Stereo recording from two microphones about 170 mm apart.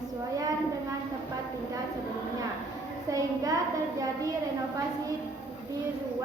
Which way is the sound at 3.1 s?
20° right (ahead or behind).